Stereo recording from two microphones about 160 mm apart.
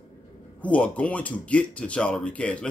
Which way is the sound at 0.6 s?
10° left (ahead or behind).